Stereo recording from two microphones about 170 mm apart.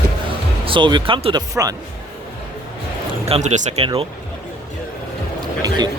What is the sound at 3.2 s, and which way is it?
Speech, 40° right (ahead or behind).